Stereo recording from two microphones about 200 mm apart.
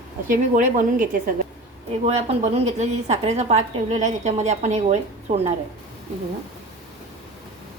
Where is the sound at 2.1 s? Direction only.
35° right (ahead or behind).